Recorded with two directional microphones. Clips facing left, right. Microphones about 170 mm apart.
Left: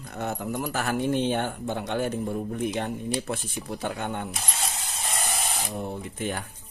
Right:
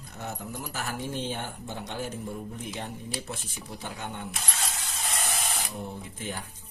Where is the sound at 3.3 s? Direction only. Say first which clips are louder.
Left 7 dB; 55° left (ahead or behind).